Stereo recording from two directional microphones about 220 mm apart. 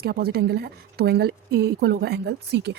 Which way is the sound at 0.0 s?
45° right (ahead or behind).